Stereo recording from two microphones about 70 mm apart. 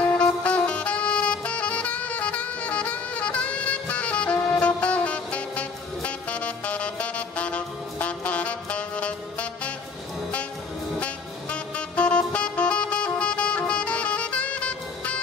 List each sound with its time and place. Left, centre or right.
0.2 s music: centre
11.5 s music: centre